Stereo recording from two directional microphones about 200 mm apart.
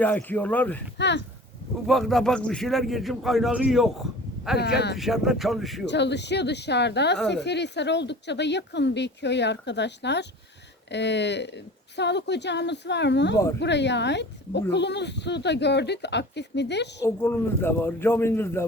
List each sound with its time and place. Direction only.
0.0 s a man's voice: 10° left (ahead or behind)
0.9 s speech: 60° left (ahead or behind)
1.9 s a man's voice: centre (ahead or behind)
5.8 s speech: 60° left (ahead or behind)
17.0 s a man's voice: 10° left (ahead or behind)